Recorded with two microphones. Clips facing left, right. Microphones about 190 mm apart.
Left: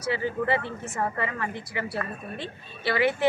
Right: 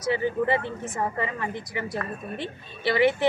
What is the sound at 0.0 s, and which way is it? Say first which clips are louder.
Speech: right 3 dB; 20° right (ahead or behind).